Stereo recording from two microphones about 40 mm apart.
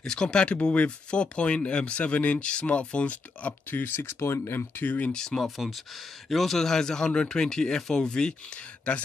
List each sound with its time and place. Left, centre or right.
0.0 s speech: centre; by 3.5 s left
3.7 s speech: left
5.1 s speech: centre
5.6 s speech: centre; by 9.0 s left